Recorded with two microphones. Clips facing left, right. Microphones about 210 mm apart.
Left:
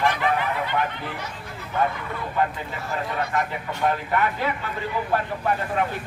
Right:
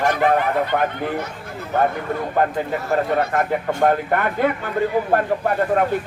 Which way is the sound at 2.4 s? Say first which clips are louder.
Right 4 dB; 50° right (ahead or behind).